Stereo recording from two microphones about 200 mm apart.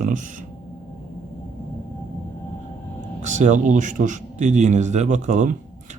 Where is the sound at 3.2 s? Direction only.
35° right (ahead or behind).